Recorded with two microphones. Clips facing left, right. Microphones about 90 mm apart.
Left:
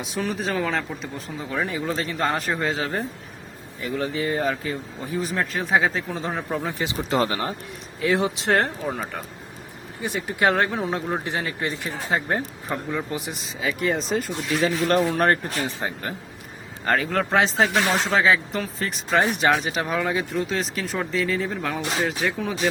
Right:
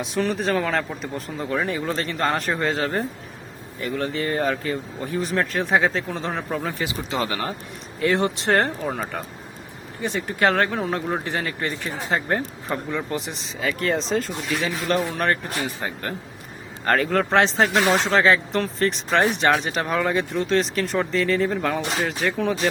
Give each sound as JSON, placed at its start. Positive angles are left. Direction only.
{"t": 0.2, "sound": "speech", "side_deg": 0}
{"t": 7.1, "sound": "speech", "side_deg": 35}
{"t": 8.0, "sound": "speech", "side_deg": 0}
{"t": 10.0, "sound": "speech", "side_deg": 10}
{"t": 14.6, "sound": "speech", "side_deg": 40}
{"t": 15.5, "sound": "speech", "side_deg": 25}
{"t": 16.8, "sound": "speech", "side_deg": 0}